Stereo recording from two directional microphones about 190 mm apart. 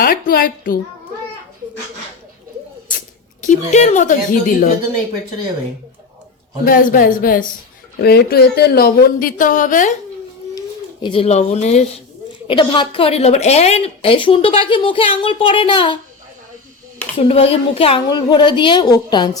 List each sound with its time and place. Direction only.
0.0 s speech: 50° left (ahead or behind)
3.7 s a woman's voice: 40° left (ahead or behind)
6.7 s speech: 50° left (ahead or behind)
11.0 s a woman's voice: 30° left (ahead or behind)
12.5 s a woman's voice: 25° left (ahead or behind)
17.2 s a woman's voice: 30° left (ahead or behind)